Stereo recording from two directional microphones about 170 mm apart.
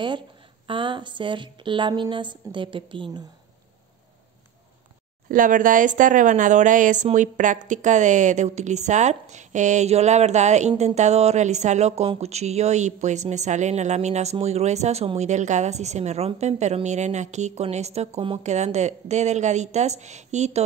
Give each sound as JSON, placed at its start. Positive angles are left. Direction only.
{"t": 0.7, "sound": "a woman's voice", "side_deg": -30}
{"t": 5.3, "sound": "speech", "side_deg": -50}